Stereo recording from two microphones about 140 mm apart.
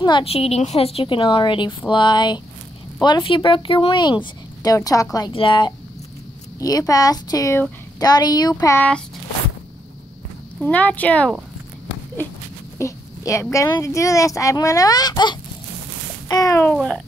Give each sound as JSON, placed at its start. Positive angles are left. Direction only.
{"t": 0.0, "sound": "a woman's voice", "side_deg": 40}
{"t": 5.3, "sound": "speech", "side_deg": 35}
{"t": 6.6, "sound": "a woman's voice", "side_deg": 25}
{"t": 8.7, "sound": "speech", "side_deg": 10}
{"t": 10.6, "sound": "speech", "side_deg": 10}
{"t": 12.7, "sound": "a woman's voice", "side_deg": 20}
{"t": 16.7, "sound": "speech", "side_deg": 0}